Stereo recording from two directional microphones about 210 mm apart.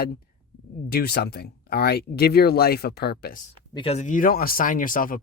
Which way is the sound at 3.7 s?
25° left (ahead or behind).